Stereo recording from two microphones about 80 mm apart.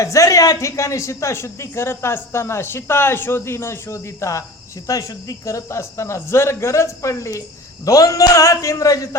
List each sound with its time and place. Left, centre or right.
0.0 s speech: left